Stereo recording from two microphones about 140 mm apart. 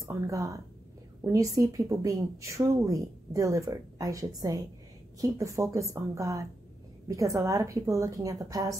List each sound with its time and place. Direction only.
0.1 s speech: 25° right (ahead or behind)